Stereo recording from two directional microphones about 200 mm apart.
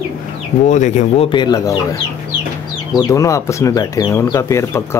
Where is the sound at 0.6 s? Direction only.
35° left (ahead or behind); by 1.8 s 20° left (ahead or behind).